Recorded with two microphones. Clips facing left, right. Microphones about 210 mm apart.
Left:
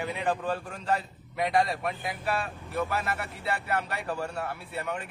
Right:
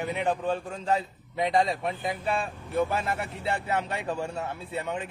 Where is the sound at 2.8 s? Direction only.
25° right (ahead or behind).